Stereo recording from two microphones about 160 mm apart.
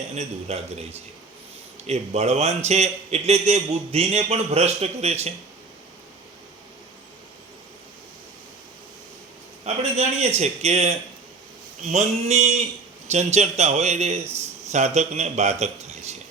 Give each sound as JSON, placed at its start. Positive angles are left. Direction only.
{"t": 0.1, "sound": "a man's voice", "side_deg": -40}
{"t": 9.7, "sound": "a sound", "side_deg": -40}
{"t": 10.2, "sound": "a man's voice", "side_deg": -45}